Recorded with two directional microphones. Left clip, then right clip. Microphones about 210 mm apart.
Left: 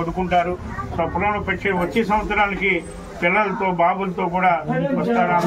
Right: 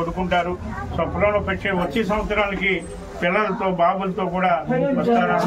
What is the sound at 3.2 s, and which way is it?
A man's voice, 20° right (ahead or behind).